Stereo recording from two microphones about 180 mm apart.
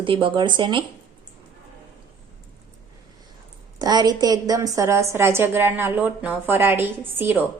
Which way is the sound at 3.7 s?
20° right (ahead or behind).